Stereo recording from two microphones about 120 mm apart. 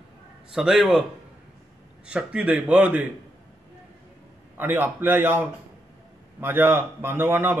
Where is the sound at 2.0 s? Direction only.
10° right (ahead or behind).